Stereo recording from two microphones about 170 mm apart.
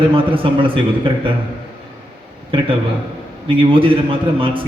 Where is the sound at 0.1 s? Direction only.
30° right (ahead or behind).